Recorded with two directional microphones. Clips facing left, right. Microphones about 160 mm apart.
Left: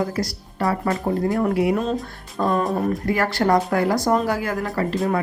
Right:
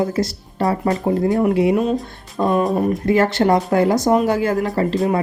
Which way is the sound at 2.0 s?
15° right (ahead or behind).